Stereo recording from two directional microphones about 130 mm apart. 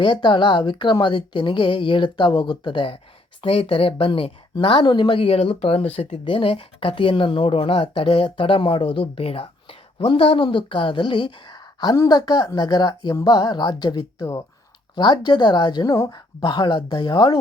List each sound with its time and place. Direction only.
0.0 s speech: 40° left (ahead or behind)